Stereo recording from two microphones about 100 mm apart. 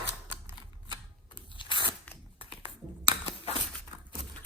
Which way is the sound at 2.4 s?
70° left (ahead or behind).